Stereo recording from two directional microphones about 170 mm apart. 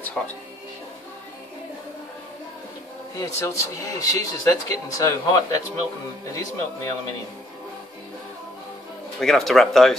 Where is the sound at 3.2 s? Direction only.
20° left (ahead or behind).